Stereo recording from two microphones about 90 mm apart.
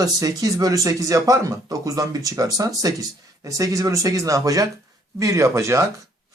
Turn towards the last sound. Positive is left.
turn(degrees=-35)  # may be behind; listen again after turning